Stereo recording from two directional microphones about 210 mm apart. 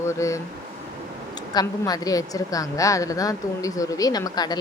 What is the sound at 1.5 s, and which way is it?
A woman's voice, 15° left (ahead or behind).